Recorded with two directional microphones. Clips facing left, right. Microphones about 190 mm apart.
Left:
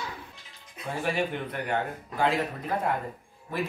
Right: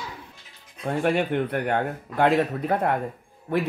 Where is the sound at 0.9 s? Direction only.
60° right (ahead or behind).